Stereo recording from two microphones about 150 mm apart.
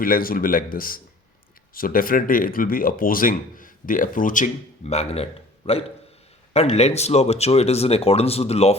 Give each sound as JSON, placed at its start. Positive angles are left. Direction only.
{"t": 0.0, "sound": "speech", "side_deg": 75}
{"t": 4.9, "sound": "a man's voice", "side_deg": 45}